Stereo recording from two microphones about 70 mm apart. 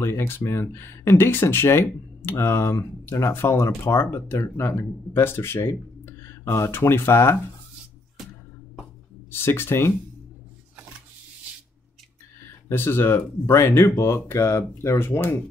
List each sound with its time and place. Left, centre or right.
0.0 s speech: left
9.3 s speech: left
12.6 s speech: left